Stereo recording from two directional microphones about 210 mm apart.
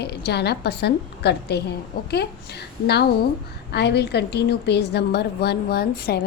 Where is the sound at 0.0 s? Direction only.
50° left (ahead or behind).